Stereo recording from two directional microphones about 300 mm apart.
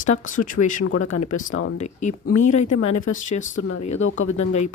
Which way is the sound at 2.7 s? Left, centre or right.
Left.